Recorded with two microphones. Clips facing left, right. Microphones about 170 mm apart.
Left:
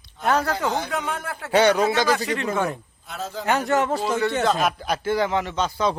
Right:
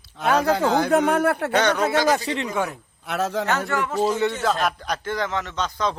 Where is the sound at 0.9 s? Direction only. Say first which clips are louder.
Right 10 dB; 60° right (ahead or behind).